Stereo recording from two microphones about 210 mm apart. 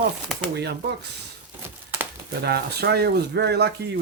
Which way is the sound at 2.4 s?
50° right (ahead or behind).